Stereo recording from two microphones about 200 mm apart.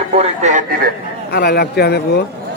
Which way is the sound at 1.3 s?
50° left (ahead or behind).